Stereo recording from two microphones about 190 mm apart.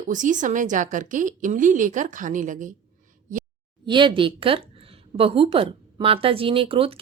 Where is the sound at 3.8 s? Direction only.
25° right (ahead or behind).